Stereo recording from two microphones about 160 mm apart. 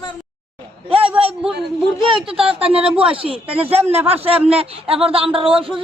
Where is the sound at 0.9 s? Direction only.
35° right (ahead or behind).